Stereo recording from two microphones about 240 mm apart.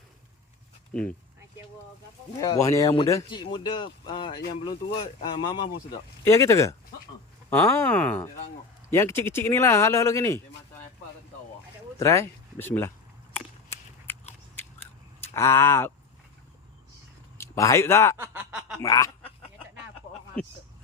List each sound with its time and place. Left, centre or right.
0.9 s speech: centre
2.4 s speech: centre
11.9 s speech: centre
14.1 s biting: centre
15.2 s speech: centre
17.3 s speech: centre
18.2 s snicker: centre
18.8 s speech: centre
20.4 s speech: centre